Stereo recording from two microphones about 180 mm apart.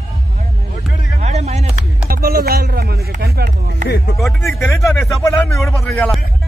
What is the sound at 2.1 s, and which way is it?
Music, 55° right (ahead or behind).